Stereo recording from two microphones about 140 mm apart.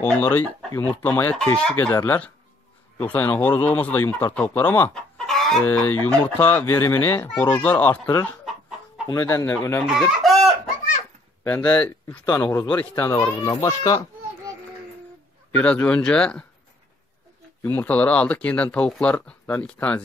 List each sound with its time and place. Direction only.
0.0 s a man's voice: 15° left (ahead or behind)
1.8 s speech: 30° left (ahead or behind)
2.0 s a man's voice: 10° left (ahead or behind)
5.7 s a man's voice: 15° left (ahead or behind)
9.8 s chicken: centre (ahead or behind)
11.4 s a man's voice: 15° left (ahead or behind)
15.5 s a man's voice: 10° left (ahead or behind)
17.6 s a man's voice: 15° left (ahead or behind)